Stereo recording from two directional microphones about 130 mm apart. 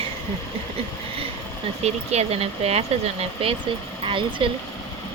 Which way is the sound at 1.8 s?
55° right (ahead or behind).